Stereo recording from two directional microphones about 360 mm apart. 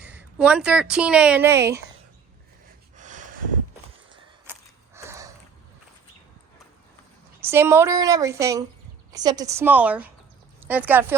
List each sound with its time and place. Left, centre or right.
0.0 s speech: centre
3.0 s a sound: right
4.9 s sniff: centre
7.4 s a woman's voice: centre